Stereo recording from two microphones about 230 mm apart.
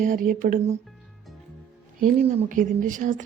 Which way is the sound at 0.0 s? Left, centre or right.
Right.